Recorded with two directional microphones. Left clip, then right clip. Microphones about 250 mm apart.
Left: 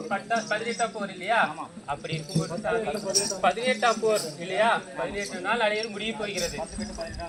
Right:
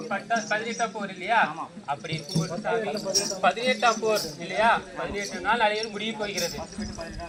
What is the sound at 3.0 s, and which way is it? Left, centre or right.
Speech, centre.